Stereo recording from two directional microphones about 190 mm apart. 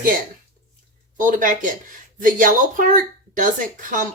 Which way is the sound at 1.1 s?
45° right (ahead or behind).